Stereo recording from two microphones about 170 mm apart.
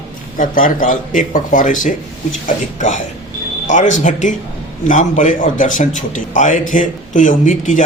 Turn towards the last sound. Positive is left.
turn(degrees=50)  # may be behind; listen again after turning